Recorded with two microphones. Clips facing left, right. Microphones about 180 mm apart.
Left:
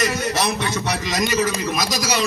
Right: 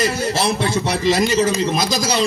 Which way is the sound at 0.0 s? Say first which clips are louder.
Right 2 dB; 30° right (ahead or behind).